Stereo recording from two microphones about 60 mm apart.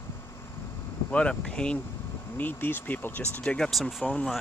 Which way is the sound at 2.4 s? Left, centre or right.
Left.